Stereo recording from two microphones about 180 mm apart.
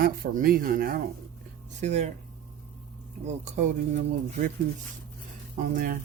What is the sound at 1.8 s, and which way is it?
Speech, 40° right (ahead or behind).